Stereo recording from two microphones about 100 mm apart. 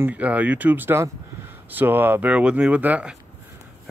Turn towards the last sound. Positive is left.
turn(degrees=-10)  # may be behind; listen again after turning